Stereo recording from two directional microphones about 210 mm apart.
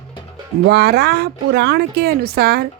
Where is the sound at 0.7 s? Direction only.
50° right (ahead or behind).